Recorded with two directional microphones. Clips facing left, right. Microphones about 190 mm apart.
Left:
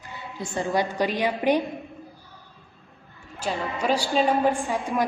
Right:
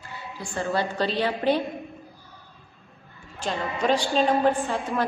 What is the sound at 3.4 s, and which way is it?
A woman's voice, 10° left (ahead or behind).